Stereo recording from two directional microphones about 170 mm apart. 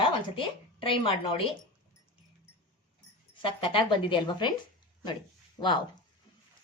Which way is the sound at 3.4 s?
30° left (ahead or behind).